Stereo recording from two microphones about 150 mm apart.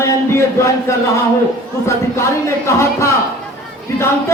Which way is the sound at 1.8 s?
20° left (ahead or behind).